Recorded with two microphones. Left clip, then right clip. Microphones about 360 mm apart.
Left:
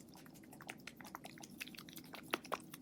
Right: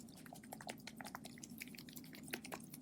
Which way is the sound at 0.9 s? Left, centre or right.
Centre.